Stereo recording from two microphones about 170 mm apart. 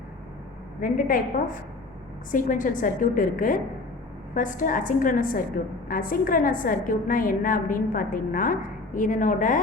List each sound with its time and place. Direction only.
0.8 s a woman's voice: 55° left (ahead or behind)
2.3 s a woman's voice: 50° left (ahead or behind)